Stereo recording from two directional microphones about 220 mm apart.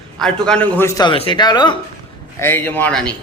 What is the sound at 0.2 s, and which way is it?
A man's voice, 5° left (ahead or behind).